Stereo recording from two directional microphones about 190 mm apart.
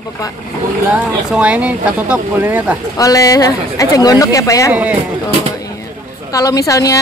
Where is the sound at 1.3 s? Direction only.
5° right (ahead or behind).